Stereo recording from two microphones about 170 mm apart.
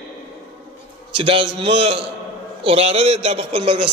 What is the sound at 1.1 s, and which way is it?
A man's voice, 30° right (ahead or behind).